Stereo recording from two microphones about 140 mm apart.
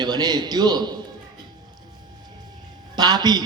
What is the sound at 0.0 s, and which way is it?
Speech, 30° right (ahead or behind).